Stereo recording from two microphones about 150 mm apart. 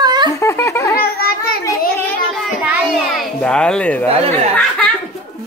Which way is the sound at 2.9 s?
5° left (ahead or behind).